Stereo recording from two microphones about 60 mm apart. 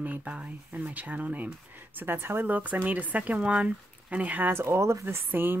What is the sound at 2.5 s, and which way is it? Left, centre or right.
Speech, right.